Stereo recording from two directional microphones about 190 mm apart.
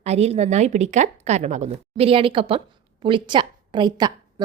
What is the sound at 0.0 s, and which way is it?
A woman's voice, 35° right (ahead or behind).